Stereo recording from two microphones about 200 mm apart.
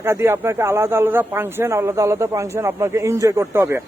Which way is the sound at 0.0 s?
10° right (ahead or behind).